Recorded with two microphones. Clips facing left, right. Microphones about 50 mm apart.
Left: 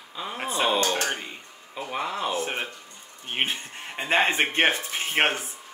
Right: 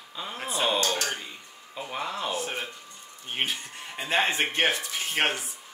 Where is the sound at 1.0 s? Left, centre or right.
Left.